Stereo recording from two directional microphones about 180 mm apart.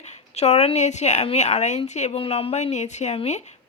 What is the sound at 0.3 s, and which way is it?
Speech, 35° left (ahead or behind).